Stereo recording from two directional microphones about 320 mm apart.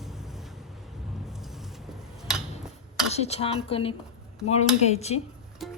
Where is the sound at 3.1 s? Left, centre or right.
Centre.